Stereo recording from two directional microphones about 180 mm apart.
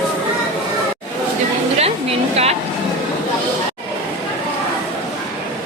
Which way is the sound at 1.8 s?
35° right (ahead or behind).